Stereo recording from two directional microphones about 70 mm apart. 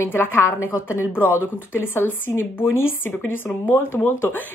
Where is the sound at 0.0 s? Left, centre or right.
Left.